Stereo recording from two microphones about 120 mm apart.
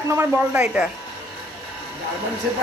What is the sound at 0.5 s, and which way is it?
Speech, 10° right (ahead or behind).